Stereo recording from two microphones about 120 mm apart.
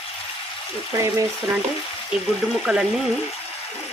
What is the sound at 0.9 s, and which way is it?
Speech, 25° right (ahead or behind).